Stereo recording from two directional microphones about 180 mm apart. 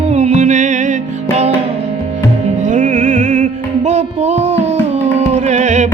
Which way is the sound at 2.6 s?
45° right (ahead or behind).